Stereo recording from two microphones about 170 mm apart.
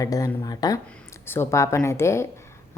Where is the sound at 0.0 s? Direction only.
20° left (ahead or behind).